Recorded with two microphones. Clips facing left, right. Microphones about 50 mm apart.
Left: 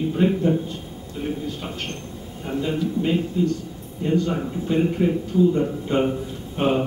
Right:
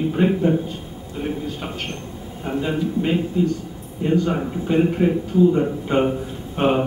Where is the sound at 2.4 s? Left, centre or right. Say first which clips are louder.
Right 2 dB; right.